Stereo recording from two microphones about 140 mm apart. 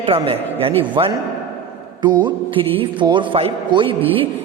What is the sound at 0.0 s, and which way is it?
A man's voice, 40° right (ahead or behind).